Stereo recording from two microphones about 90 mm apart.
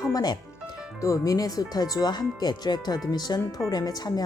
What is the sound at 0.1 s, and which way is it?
A woman's voice, 45° left (ahead or behind).